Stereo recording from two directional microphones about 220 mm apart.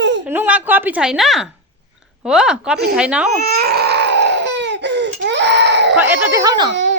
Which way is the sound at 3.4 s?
45° right (ahead or behind).